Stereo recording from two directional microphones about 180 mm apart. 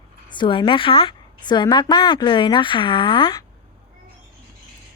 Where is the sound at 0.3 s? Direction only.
25° left (ahead or behind).